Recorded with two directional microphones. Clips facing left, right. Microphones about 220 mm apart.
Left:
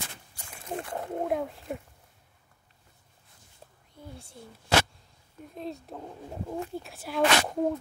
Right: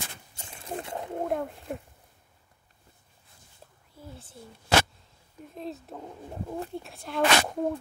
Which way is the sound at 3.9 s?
5° right (ahead or behind).